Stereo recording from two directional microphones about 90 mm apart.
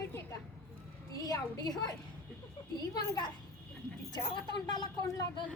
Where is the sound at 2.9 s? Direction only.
50° left (ahead or behind).